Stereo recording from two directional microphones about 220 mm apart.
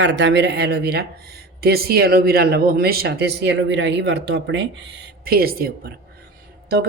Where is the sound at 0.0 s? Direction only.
55° right (ahead or behind).